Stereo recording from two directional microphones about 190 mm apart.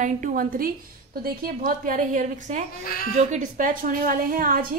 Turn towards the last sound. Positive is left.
turn(degrees=-50)  # may be behind; listen again after turning